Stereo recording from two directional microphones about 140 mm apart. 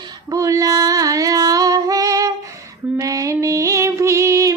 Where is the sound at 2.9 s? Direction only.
25° right (ahead or behind).